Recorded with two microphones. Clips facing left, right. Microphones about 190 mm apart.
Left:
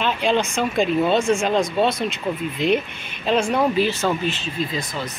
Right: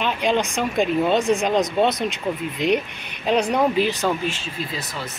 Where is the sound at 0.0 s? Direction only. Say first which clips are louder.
Left 1 dB; 15° right (ahead or behind).